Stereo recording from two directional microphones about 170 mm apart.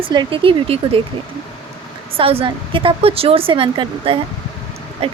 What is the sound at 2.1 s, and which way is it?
A woman's voice, 35° right (ahead or behind).